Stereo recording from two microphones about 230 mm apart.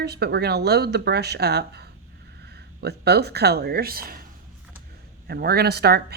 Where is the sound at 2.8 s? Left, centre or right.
Right.